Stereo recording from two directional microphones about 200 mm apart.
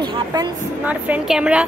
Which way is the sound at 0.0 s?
20° right (ahead or behind).